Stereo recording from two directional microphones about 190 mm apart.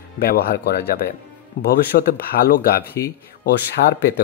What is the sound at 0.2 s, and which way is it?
Speech, 55° left (ahead or behind).